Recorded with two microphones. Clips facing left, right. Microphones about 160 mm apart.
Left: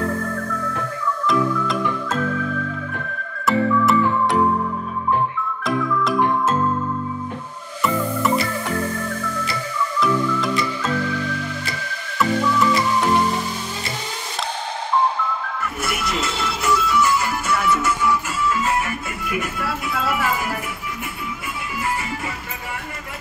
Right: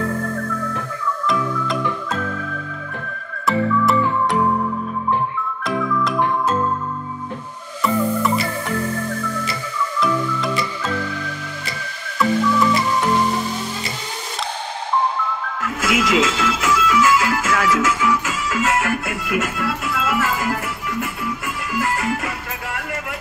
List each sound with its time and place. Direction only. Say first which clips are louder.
3.4 s music: even; centre (ahead or behind)
7.8 s music: right 2 dB; 5° left (ahead or behind)
9.9 s music: left 1 dB; centre (ahead or behind)
15.6 s music: right 9 dB; 90° right
21.7 s music: right 5 dB; 90° right